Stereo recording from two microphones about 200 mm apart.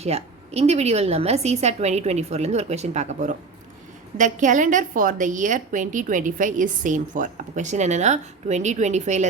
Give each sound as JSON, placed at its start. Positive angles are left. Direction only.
{"t": 0.0, "sound": "a woman's voice", "side_deg": -30}